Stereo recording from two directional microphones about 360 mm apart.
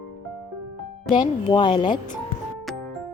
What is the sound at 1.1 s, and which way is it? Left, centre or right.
Speech, centre.